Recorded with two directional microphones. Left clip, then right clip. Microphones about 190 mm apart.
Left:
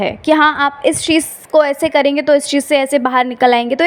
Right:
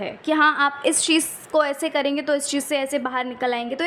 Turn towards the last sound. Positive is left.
turn(degrees=35)  # may be behind; listen again after turning